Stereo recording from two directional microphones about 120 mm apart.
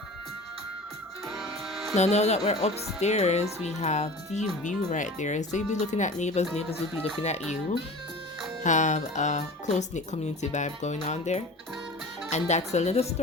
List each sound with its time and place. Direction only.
1.3 s music: centre (ahead or behind)
2.0 s speech: 65° left (ahead or behind)
4.9 s speech: 90° left; by 7.8 s 70° left (ahead or behind)
8.6 s speech: 90° left; by 13.1 s 65° left (ahead or behind)